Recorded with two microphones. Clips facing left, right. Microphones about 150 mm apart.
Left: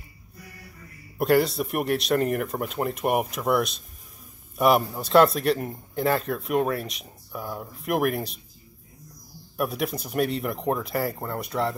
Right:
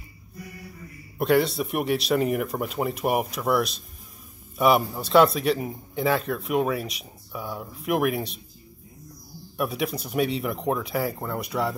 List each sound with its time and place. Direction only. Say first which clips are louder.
1.1 s a man's voice: even; centre (ahead or behind)
9.6 s a man's voice: even; centre (ahead or behind)